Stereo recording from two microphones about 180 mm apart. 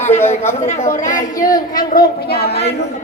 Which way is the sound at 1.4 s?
20° left (ahead or behind).